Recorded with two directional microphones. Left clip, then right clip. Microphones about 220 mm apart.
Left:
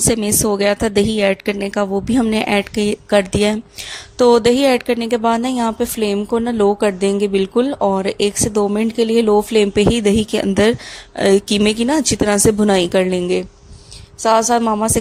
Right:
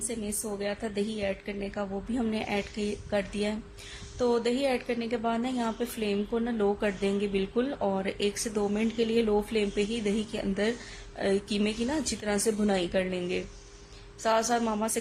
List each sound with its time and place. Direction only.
0.1 s a woman's voice: 45° left (ahead or behind)